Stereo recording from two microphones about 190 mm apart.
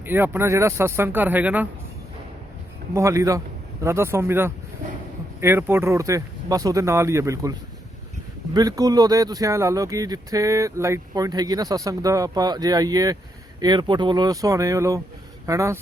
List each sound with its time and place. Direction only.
0.0 s speech: 10° right (ahead or behind)
2.9 s speech: 15° right (ahead or behind)
8.5 s speech: 20° right (ahead or behind)